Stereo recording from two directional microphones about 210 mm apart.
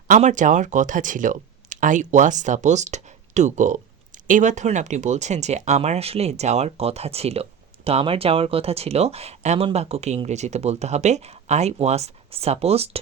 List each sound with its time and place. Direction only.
0.1 s speech: 35° right (ahead or behind)